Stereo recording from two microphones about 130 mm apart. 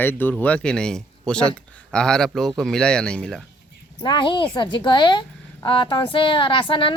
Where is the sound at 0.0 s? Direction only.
15° left (ahead or behind).